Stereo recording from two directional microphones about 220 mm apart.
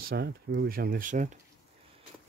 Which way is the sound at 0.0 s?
50° right (ahead or behind).